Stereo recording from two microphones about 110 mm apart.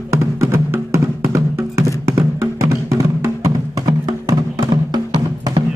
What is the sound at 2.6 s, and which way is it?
Music, 30° right (ahead or behind).